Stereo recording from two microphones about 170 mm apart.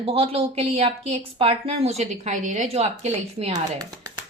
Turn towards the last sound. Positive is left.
turn(degrees=-40)  # may be behind; listen again after turning